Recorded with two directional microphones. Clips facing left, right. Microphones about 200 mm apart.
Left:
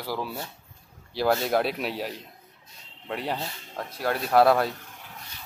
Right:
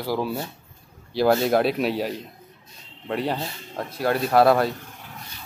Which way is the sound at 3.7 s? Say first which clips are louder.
Right 5 dB; 5° right (ahead or behind).